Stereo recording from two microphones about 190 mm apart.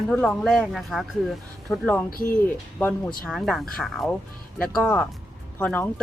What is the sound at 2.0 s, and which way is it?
Speech, 50° left (ahead or behind).